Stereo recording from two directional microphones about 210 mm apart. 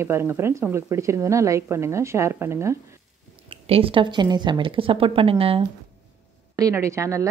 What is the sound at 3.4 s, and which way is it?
A woman's voice, 25° right (ahead or behind).